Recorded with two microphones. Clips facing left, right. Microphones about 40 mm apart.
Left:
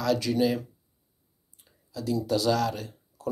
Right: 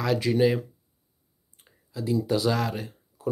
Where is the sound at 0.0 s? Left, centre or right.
Right.